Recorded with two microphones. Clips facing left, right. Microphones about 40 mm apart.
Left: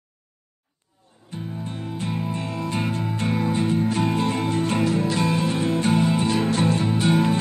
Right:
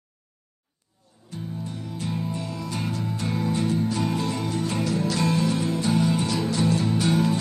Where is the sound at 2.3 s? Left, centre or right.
Left; by 5.5 s centre.